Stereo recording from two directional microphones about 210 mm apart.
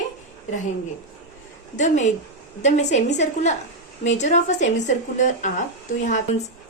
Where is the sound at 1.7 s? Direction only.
35° left (ahead or behind).